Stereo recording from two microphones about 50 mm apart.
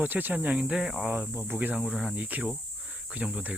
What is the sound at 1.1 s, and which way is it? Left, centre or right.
Speech, right.